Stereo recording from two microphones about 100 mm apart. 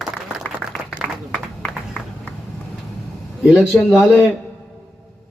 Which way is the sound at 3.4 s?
10° right (ahead or behind).